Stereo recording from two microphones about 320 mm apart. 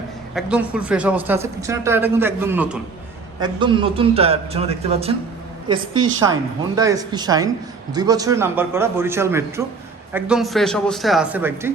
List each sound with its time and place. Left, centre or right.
0.3 s speech: centre
3.4 s a man's voice: centre